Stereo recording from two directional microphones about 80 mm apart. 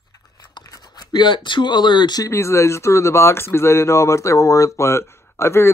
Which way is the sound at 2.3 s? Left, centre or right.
Left.